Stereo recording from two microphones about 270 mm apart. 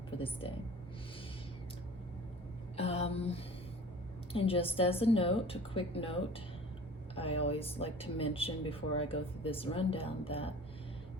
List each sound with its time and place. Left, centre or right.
0.2 s speech: centre
2.7 s speech: left